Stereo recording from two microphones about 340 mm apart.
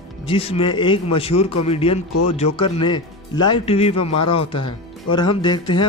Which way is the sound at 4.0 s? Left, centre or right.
Left.